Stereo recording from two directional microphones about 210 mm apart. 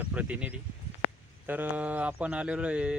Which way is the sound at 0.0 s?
5° right (ahead or behind).